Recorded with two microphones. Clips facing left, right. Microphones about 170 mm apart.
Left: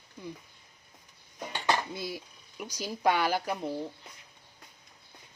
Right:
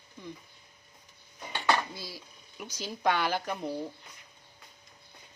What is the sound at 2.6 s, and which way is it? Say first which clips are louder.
Speech: left 2 dB; 10° left (ahead or behind).